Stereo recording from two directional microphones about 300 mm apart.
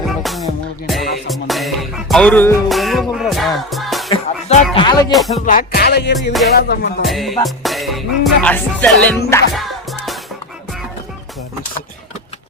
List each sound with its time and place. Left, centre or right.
0.2 s music: centre
4.1 s music: left
5.5 s music: left
7.0 s music: centre